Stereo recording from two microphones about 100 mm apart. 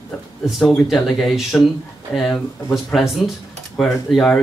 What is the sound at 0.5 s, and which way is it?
Speech, centre (ahead or behind).